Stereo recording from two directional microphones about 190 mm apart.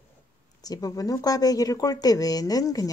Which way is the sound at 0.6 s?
20° left (ahead or behind).